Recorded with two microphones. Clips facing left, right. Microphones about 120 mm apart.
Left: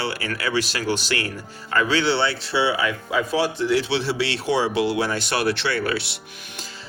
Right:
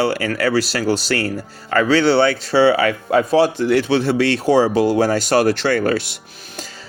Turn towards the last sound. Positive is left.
turn(degrees=-45)  # may be behind; listen again after turning